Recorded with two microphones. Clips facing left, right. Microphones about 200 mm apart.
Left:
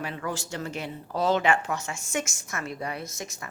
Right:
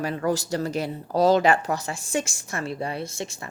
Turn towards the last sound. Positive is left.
turn(degrees=-30)  # may be behind; listen again after turning